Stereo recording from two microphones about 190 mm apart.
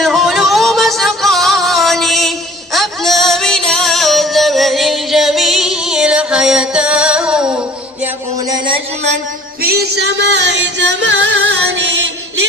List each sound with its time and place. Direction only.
0.0 s music: centre (ahead or behind)
8.0 s a sound: 20° right (ahead or behind)
9.6 s music: 55° right (ahead or behind); by 11.9 s 70° right (ahead or behind)